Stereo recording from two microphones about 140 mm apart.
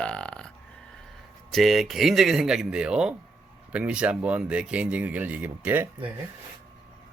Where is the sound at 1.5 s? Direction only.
Centre (ahead or behind).